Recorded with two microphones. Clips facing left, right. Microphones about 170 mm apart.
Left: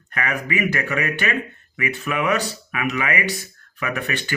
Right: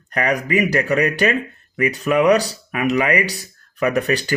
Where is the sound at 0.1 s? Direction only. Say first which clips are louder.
Right 6 dB; 35° right (ahead or behind).